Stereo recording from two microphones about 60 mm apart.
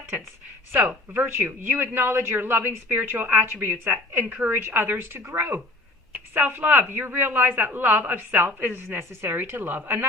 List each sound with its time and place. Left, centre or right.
0.7 s speech: right